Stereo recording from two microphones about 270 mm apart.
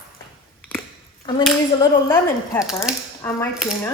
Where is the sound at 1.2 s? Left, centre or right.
Centre.